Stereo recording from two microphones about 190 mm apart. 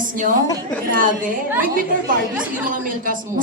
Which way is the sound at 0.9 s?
45° right (ahead or behind).